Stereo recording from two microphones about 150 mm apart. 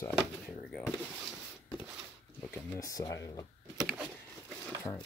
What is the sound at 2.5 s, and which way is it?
Speech, 20° left (ahead or behind).